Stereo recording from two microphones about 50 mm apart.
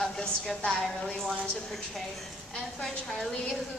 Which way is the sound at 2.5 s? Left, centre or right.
Centre.